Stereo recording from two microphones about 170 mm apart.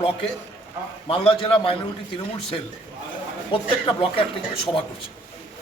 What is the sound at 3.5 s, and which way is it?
Speech, 30° left (ahead or behind).